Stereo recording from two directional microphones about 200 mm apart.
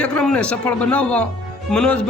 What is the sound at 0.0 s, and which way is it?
A man's voice, 5° left (ahead or behind).